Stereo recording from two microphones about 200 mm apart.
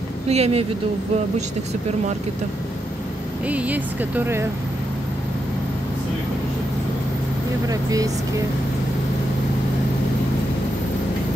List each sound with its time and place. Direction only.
0.3 s a woman's voice: 30° right (ahead or behind)
3.4 s speech: 5° right (ahead or behind)
7.6 s speech: 15° right (ahead or behind)